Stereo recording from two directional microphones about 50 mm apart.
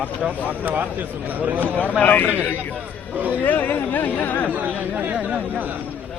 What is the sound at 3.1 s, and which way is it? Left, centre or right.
Speech, right.